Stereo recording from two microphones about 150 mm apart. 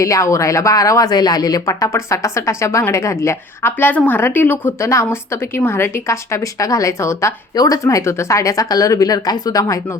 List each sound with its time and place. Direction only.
0.0 s speech: 20° left (ahead or behind)